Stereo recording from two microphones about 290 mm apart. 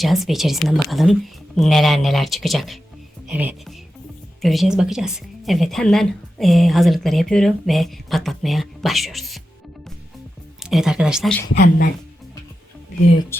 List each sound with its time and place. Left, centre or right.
0.0 s speech: centre
10.6 s speech: centre
11.5 s speech: left
13.3 s speech: centre